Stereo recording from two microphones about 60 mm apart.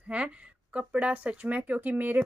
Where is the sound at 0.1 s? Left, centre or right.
Right.